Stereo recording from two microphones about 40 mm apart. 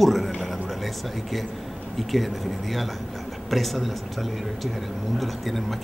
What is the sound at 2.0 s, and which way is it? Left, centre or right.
Speech, centre.